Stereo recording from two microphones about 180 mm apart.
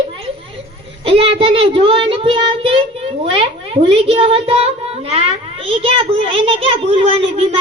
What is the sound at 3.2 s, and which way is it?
A woman's voice, 25° right (ahead or behind).